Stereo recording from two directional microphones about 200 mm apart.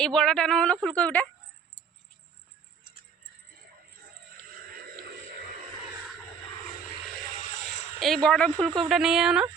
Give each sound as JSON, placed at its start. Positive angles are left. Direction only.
{"t": 0.0, "sound": "speech", "side_deg": 5}
{"t": 4.5, "sound": "a sound", "side_deg": -45}
{"t": 7.3, "sound": "vehicle", "side_deg": 35}
{"t": 7.9, "sound": "speech", "side_deg": 0}